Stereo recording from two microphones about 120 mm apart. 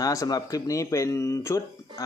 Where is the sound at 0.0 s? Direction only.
30° left (ahead or behind).